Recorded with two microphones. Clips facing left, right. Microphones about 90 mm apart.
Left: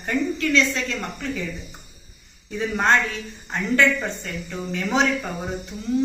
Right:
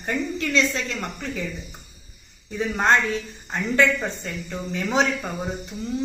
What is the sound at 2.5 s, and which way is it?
A woman's voice, 35° right (ahead or behind).